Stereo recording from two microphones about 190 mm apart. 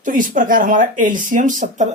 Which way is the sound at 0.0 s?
45° right (ahead or behind).